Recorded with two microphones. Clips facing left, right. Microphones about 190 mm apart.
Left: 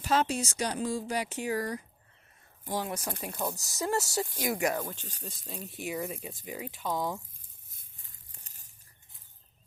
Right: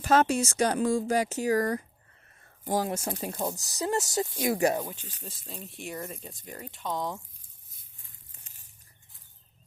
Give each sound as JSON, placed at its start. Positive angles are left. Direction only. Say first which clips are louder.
{"t": 0.0, "sound": "speech", "louder": "right 5 dB", "side_deg": -45}
{"t": 2.9, "sound": "speech", "louder": "right 4 dB", "side_deg": -30}
{"t": 3.6, "sound": "speech", "louder": "even", "side_deg": -20}
{"t": 5.2, "sound": "speech", "louder": "left 1 dB", "side_deg": 0}
{"t": 8.3, "sound": "tearing", "louder": "left 1 dB", "side_deg": 40}